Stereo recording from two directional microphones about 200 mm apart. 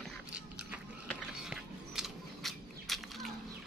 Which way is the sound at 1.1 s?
5° right (ahead or behind).